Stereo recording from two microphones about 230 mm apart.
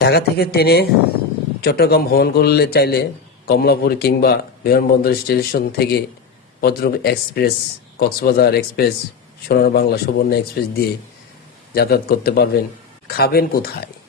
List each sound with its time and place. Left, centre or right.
0.0 s speech: left